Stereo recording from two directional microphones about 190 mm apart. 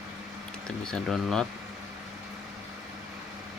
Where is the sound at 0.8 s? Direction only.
5° left (ahead or behind).